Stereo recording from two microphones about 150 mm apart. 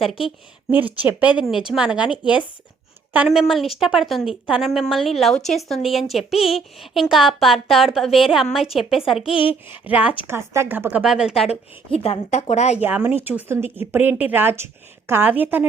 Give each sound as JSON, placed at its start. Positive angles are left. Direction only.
{"t": 0.7, "sound": "speech", "side_deg": -10}
{"t": 9.3, "sound": "a child's voice", "side_deg": 35}
{"t": 9.6, "sound": "speech", "side_deg": -10}
{"t": 11.4, "sound": "a woman's voice", "side_deg": 40}
{"t": 12.8, "sound": "speech", "side_deg": -15}